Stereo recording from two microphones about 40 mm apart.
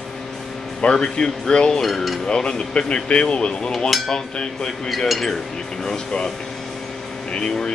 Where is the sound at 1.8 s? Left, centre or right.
Centre.